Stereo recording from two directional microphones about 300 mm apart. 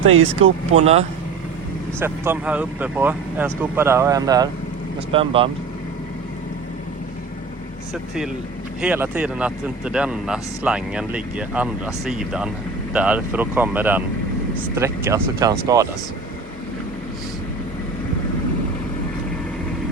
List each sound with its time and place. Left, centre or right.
0.0 s speech: right
0.3 s speech: right
2.0 s speech: centre
8.8 s speech: centre